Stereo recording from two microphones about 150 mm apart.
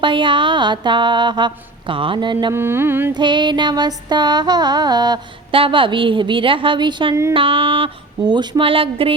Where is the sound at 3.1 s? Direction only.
30° right (ahead or behind).